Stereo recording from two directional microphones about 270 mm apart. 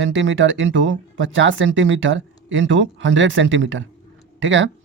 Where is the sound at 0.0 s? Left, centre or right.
Right.